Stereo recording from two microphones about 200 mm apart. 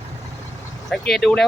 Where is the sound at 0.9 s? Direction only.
Centre (ahead or behind).